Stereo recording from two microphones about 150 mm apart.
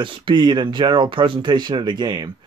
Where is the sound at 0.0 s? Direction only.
35° right (ahead or behind).